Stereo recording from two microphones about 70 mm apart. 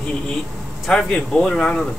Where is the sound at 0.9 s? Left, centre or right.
Centre.